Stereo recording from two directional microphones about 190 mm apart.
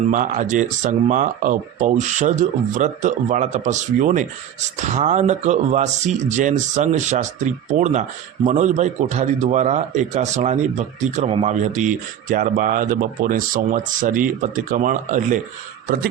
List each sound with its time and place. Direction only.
0.1 s speech: 40° right (ahead or behind)